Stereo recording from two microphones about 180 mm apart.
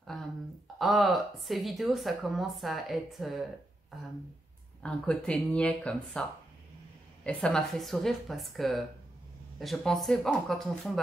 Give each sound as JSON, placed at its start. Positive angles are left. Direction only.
{"t": 0.7, "sound": "speech", "side_deg": 0}
{"t": 4.8, "sound": "speech", "side_deg": 5}
{"t": 7.2, "sound": "speech", "side_deg": 5}